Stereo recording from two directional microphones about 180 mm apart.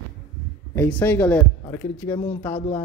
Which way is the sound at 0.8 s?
10° left (ahead or behind).